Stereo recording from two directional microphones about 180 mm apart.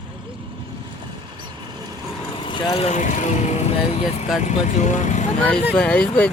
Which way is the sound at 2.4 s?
25° left (ahead or behind).